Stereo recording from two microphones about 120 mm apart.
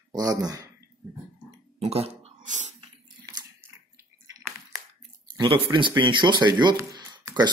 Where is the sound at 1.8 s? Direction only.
60° right (ahead or behind).